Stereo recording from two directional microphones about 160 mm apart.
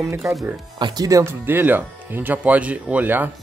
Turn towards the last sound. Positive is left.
turn(degrees=-10)  # may be behind; listen again after turning